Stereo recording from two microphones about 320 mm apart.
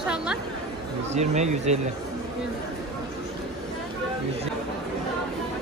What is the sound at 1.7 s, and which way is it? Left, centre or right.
Speech, right.